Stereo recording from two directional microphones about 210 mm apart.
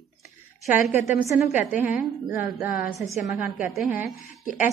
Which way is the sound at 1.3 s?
5° right (ahead or behind).